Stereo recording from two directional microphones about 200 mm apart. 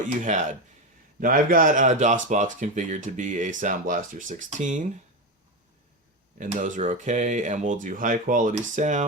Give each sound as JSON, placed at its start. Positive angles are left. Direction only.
{"t": 0.2, "sound": "speech", "side_deg": -40}
{"t": 6.4, "sound": "speech", "side_deg": -40}